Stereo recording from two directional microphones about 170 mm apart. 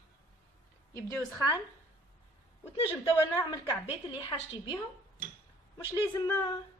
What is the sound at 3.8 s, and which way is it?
Speech, 35° left (ahead or behind).